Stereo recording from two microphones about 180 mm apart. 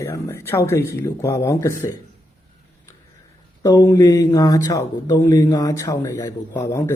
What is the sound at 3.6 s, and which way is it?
Speech, 20° left (ahead or behind).